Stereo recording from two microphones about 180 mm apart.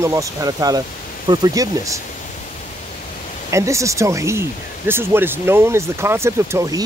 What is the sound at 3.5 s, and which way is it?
Speech, 15° right (ahead or behind).